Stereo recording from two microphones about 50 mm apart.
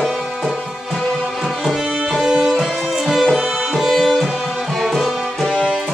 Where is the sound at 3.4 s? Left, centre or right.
Centre.